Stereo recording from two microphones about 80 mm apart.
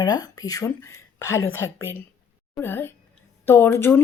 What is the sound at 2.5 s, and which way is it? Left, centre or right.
Speech, left.